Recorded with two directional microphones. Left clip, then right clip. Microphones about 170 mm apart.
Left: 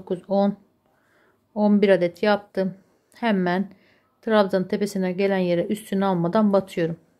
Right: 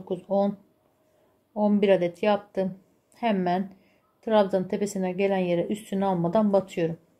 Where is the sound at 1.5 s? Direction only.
35° left (ahead or behind).